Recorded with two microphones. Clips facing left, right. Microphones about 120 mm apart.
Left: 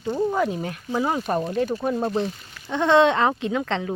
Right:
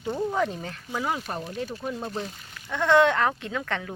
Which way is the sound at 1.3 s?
75° left (ahead or behind).